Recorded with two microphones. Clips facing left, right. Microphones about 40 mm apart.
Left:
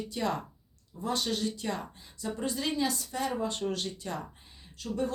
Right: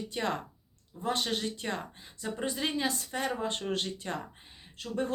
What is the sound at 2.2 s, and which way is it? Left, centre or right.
Speech, right.